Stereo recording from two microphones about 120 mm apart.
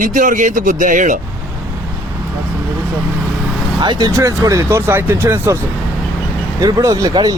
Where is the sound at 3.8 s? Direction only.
35° right (ahead or behind).